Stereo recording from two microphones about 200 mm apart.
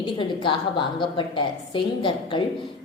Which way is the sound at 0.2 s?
25° left (ahead or behind).